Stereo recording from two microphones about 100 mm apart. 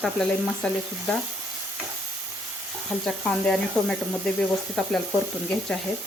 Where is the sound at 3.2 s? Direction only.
10° left (ahead or behind).